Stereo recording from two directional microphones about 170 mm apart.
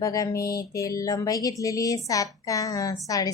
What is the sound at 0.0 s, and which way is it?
A woman's voice, 20° left (ahead or behind).